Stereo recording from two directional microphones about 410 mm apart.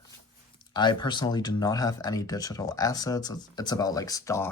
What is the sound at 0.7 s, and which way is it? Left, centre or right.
Speech, centre.